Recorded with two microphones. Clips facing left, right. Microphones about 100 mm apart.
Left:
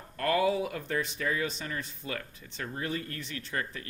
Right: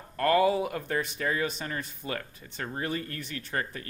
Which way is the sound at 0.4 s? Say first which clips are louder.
Right 3 dB; 50° right (ahead or behind).